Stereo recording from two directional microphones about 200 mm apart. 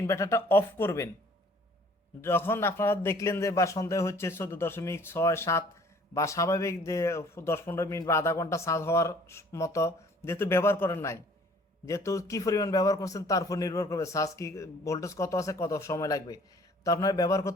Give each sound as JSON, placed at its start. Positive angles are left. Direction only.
{"t": 0.1, "sound": "a man's voice", "side_deg": 15}
{"t": 2.2, "sound": "a man's voice", "side_deg": 10}